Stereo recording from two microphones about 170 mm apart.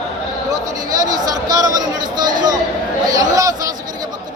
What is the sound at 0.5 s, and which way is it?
Speech, 20° right (ahead or behind).